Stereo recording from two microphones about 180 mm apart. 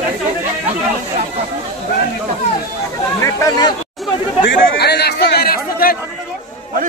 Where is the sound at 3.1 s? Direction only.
15° left (ahead or behind).